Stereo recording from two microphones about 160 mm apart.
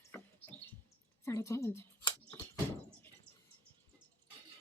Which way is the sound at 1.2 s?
20° left (ahead or behind).